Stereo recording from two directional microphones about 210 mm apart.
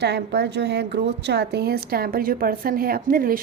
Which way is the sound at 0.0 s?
50° right (ahead or behind).